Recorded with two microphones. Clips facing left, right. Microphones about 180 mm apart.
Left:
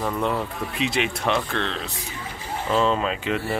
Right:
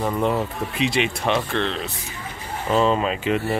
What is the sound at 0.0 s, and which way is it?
Speech, 10° right (ahead or behind).